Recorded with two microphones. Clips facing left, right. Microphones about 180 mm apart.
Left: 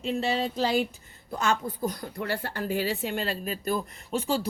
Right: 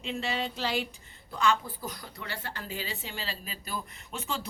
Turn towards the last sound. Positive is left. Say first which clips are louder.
# left 9 dB
turn(degrees=35)  # may be behind; listen again after turning